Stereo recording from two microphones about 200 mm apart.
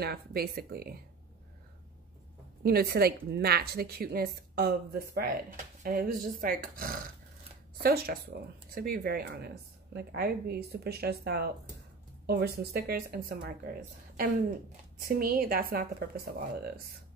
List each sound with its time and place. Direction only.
0.0 s speech: 50° right (ahead or behind)
2.6 s speech: 50° right (ahead or behind)
15.0 s speech: 45° right (ahead or behind)